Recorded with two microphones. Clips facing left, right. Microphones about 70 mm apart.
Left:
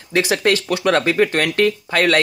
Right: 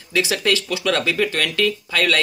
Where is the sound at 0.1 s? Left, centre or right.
Left.